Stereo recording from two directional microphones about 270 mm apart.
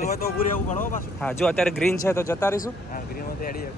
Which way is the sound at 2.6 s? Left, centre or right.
Left.